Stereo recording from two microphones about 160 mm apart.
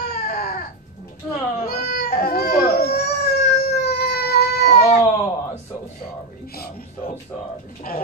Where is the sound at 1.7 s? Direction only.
70° left (ahead or behind); by 3.2 s 90° left.